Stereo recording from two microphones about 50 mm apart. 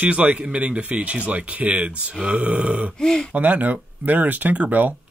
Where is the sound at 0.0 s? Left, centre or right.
Right.